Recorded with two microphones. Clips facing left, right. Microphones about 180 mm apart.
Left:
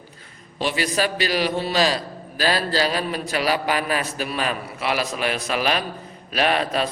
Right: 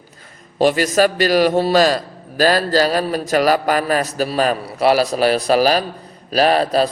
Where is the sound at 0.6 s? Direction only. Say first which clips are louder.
Right 9 dB; 45° right (ahead or behind).